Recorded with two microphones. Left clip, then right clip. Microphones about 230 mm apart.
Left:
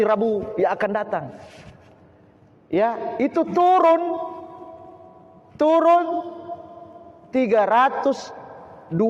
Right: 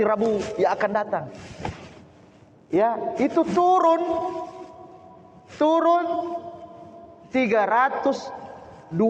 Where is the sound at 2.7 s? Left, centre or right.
Left.